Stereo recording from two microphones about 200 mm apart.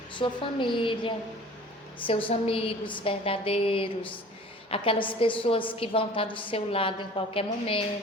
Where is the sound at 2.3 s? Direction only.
30° left (ahead or behind).